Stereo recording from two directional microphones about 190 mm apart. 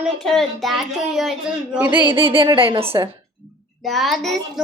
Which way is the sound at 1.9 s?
25° right (ahead or behind).